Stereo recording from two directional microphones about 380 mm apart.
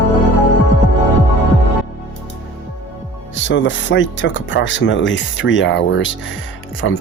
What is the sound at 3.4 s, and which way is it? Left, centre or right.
Speech, left.